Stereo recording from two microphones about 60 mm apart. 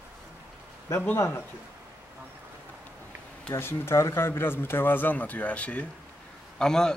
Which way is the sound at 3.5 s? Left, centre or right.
Left.